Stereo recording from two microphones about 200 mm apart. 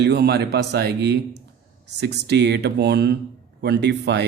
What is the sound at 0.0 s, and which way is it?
A man's voice, 55° right (ahead or behind).